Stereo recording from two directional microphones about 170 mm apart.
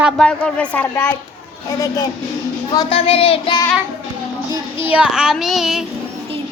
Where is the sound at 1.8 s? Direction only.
20° left (ahead or behind).